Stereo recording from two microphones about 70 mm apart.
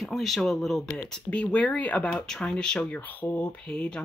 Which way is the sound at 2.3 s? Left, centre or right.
Centre.